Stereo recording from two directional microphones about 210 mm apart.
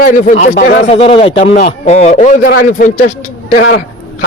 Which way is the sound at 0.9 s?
25° left (ahead or behind).